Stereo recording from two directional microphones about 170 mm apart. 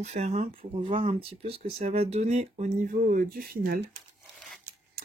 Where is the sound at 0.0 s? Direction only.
40° right (ahead or behind); by 3.8 s 60° right (ahead or behind).